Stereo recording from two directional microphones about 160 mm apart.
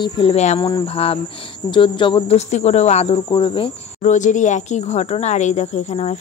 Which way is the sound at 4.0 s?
50° left (ahead or behind).